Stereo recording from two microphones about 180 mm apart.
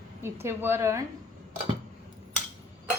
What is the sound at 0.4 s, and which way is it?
Dishes, 15° right (ahead or behind).